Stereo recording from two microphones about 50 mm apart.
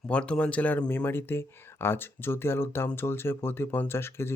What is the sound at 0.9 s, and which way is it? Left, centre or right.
Speech, left.